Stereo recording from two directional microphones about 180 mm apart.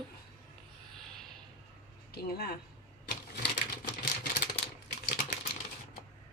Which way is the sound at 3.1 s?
65° left (ahead or behind).